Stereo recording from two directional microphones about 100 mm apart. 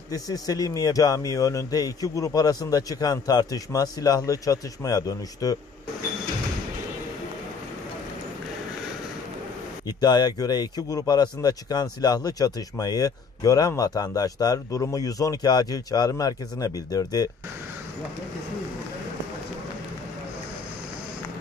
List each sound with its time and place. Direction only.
0.1 s speech: 40° left (ahead or behind)
9.8 s speech: 45° left (ahead or behind)